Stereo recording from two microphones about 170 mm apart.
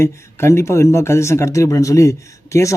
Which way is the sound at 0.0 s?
15° left (ahead or behind).